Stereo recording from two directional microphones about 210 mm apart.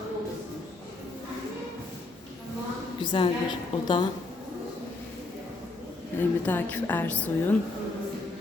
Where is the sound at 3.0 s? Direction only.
25° left (ahead or behind).